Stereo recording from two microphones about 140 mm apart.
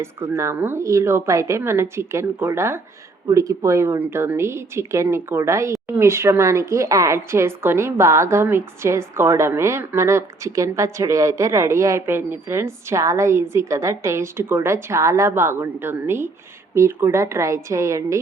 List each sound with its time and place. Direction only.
0.0 s speech: 20° right (ahead or behind)